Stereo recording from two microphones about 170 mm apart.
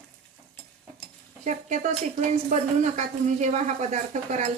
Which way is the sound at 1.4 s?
45° right (ahead or behind).